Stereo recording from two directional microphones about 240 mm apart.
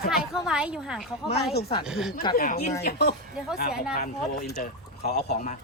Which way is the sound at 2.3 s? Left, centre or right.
Left.